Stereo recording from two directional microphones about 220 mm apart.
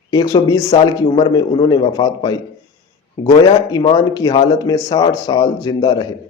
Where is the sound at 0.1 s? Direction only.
20° left (ahead or behind).